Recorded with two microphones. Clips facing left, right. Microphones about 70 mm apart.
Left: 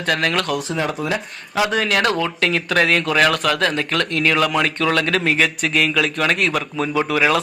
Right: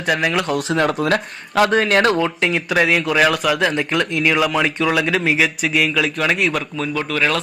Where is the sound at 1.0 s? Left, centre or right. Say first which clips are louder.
Right 4 dB; right.